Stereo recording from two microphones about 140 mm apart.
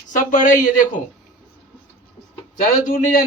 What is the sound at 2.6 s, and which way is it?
Speech, 80° left.